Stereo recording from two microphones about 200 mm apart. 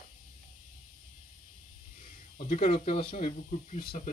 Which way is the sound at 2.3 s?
35° left (ahead or behind).